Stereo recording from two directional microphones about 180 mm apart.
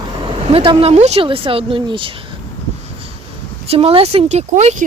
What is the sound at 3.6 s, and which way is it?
Speech, 30° right (ahead or behind).